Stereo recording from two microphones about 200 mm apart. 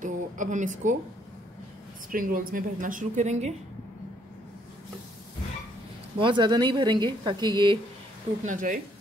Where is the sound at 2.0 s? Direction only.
45° right (ahead or behind).